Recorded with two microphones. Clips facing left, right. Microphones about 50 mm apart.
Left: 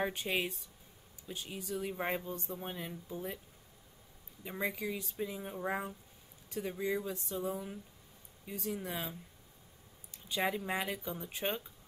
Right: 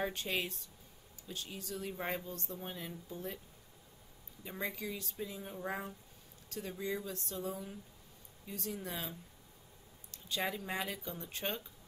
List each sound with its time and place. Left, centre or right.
0.0 s speech: centre
4.5 s speech: centre
10.1 s speech: centre